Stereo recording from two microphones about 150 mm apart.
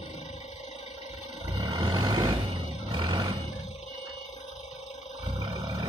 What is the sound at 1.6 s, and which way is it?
Vehicle, 30° right (ahead or behind).